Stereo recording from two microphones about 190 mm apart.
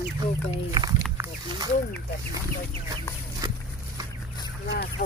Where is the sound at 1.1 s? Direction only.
20° right (ahead or behind).